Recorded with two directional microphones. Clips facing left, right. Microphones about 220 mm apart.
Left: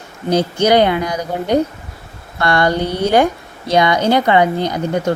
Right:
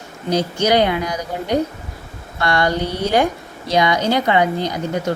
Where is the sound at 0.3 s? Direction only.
55° left (ahead or behind).